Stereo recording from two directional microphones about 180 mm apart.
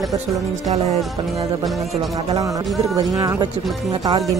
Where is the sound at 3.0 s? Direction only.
20° right (ahead or behind).